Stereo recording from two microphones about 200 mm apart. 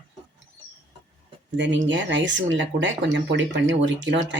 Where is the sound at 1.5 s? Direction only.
65° right (ahead or behind).